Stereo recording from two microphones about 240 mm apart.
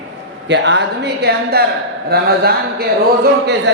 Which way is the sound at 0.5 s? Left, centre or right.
Right.